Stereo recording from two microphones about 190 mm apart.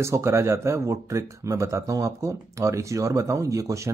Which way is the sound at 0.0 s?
15° right (ahead or behind).